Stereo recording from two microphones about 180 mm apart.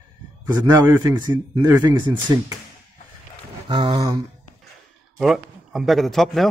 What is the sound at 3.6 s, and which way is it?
Speech, 25° right (ahead or behind).